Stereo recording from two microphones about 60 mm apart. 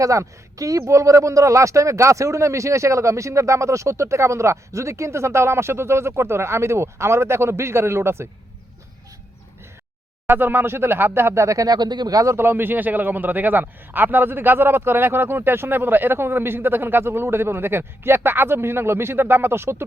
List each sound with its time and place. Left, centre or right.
0.0 s speech: right
10.2 s a man's voice: right
11.4 s speech: right
12.4 s a man's voice: right